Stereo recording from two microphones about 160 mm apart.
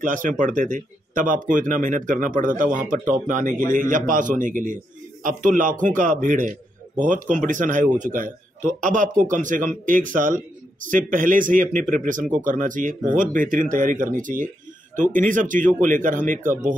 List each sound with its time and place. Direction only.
0.0 s a man's voice: 55° right (ahead or behind)